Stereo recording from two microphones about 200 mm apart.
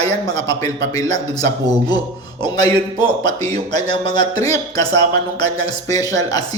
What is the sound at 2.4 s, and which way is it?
Speech, 20° left (ahead or behind).